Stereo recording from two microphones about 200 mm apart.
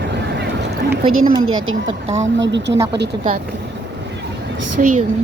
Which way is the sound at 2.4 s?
60° right (ahead or behind).